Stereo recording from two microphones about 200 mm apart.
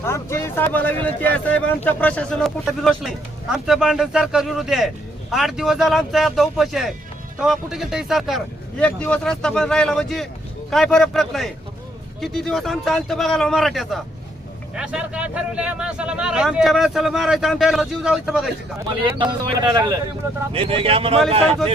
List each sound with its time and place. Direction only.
0.0 s a man's voice: 15° left (ahead or behind); by 18.5 s centre (ahead or behind)
19.0 s speech: 25° right (ahead or behind)